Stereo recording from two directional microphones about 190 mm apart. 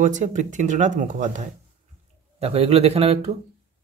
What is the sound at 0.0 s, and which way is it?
Speech, 40° right (ahead or behind).